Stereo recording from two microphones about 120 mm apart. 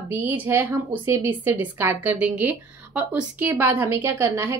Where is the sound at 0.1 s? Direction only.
20° right (ahead or behind).